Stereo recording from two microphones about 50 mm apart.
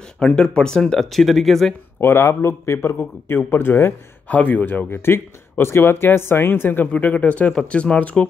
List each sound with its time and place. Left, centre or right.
0.2 s speech: centre
2.0 s speech: left
3.0 s speech: left
4.3 s speech: left
6.9 s speech: left